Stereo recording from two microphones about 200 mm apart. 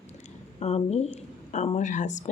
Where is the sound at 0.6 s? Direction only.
30° left (ahead or behind).